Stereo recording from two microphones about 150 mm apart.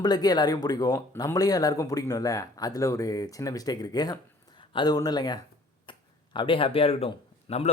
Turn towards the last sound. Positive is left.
turn(degrees=40)  # may be behind; listen again after turning